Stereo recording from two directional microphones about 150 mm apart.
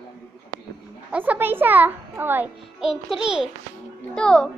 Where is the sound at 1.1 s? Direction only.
10° right (ahead or behind).